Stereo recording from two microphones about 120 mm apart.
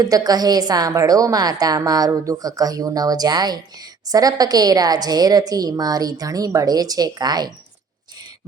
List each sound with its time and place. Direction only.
0.0 s a woman's voice: 30° right (ahead or behind)